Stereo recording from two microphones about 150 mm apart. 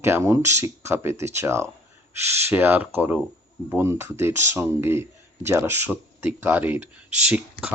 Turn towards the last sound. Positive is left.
turn(degrees=-5)  # may be behind; listen again after turning